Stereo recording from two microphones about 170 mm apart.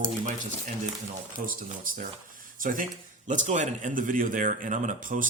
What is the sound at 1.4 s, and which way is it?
Speech, 55° right (ahead or behind).